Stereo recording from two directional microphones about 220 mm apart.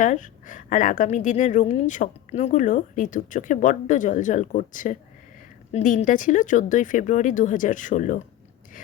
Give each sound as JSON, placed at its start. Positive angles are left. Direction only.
{"t": 0.0, "sound": "a woman's voice", "side_deg": 35}